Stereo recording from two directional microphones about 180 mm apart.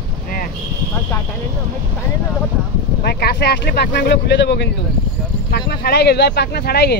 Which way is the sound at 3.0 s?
65° left (ahead or behind).